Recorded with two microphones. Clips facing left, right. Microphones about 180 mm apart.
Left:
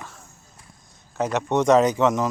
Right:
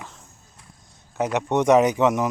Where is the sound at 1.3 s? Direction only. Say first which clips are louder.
Even; 15° right (ahead or behind).